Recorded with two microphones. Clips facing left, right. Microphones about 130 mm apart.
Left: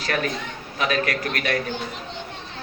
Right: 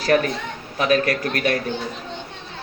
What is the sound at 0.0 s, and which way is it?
A woman's voice, 35° right (ahead or behind).